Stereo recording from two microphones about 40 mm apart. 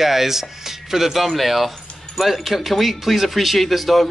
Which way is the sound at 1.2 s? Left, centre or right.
Centre.